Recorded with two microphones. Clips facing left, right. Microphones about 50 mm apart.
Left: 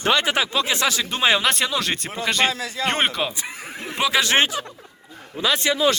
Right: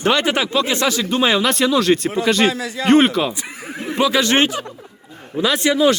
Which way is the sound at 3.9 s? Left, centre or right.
Centre.